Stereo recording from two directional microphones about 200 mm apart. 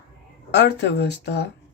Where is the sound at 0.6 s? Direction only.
60° left (ahead or behind).